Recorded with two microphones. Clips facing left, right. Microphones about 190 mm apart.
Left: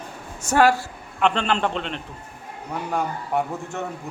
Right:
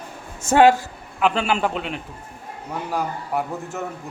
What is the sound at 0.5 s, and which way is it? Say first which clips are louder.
Speech: right 4 dB; 20° right (ahead or behind).